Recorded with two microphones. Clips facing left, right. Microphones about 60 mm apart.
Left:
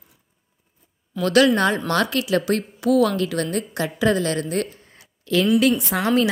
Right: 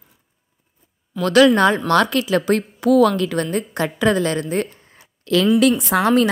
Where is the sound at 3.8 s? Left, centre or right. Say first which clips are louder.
Right 2 dB; right.